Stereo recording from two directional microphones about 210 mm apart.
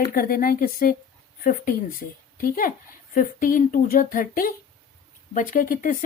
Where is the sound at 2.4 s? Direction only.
40° left (ahead or behind).